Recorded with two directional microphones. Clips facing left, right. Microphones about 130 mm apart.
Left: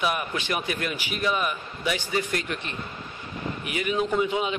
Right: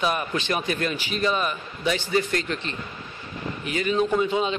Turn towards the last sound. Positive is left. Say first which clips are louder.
# right 2 dB
turn(degrees=10)  # may be behind; listen again after turning